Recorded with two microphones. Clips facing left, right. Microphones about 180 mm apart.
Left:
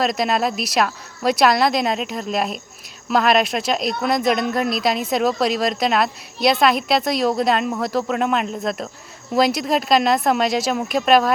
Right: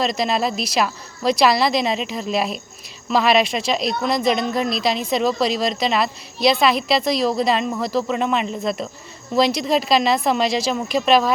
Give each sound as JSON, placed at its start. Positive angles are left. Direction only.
{"t": 0.0, "sound": "speech", "side_deg": 0}